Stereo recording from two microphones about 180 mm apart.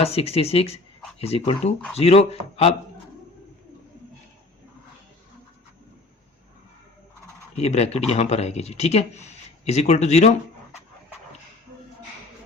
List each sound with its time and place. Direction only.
0.0 s speech: 35° left (ahead or behind)
7.5 s speech: 35° left (ahead or behind)